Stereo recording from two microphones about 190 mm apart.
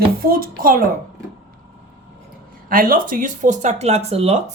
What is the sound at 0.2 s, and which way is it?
Speech, 50° right (ahead or behind).